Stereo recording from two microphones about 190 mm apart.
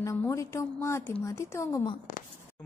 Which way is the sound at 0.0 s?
15° left (ahead or behind).